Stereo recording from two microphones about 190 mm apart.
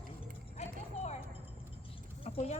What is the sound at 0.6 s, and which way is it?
Clip-clop, 35° left (ahead or behind).